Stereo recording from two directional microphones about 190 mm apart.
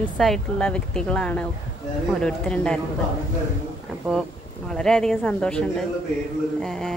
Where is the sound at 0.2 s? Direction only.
5° left (ahead or behind).